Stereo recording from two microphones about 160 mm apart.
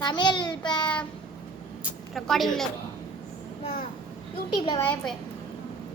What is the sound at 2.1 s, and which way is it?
Speech, centre (ahead or behind).